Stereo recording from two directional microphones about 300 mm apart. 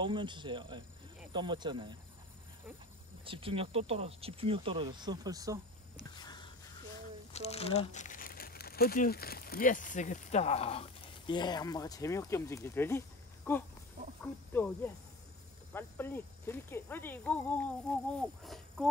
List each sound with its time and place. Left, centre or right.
0.0 s speech: centre
3.3 s speech: centre
6.1 s a sound: centre
7.3 s speech: centre